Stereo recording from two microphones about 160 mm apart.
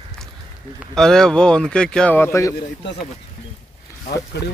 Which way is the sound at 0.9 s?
5° left (ahead or behind).